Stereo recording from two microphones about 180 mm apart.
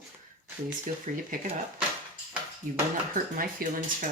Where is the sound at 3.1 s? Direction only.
50° right (ahead or behind).